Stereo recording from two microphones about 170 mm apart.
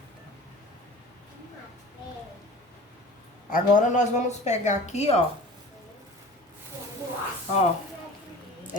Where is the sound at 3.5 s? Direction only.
50° left (ahead or behind).